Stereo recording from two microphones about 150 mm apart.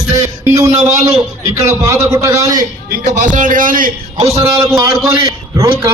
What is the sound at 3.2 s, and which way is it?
A man's voice, 60° right (ahead or behind).